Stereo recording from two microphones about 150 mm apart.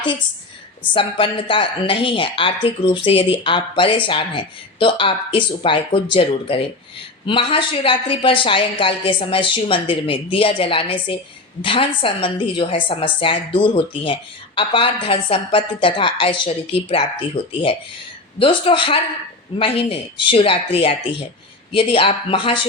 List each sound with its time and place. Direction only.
0.9 s a woman's voice: 35° left (ahead or behind)